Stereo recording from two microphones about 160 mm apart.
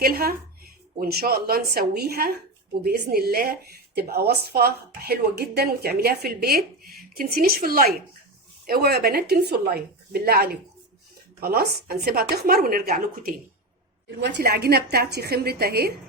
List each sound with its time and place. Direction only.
0.0 s a woman's voice: 70° right (ahead or behind)
8.6 s a woman's voice: 80° right; by 13.3 s 65° right (ahead or behind)
14.2 s a woman's voice: 90° right